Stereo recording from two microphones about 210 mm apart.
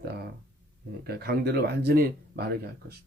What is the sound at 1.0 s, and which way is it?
Speech, 45° right (ahead or behind).